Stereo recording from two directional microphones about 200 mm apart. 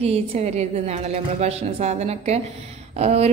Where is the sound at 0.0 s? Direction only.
30° right (ahead or behind).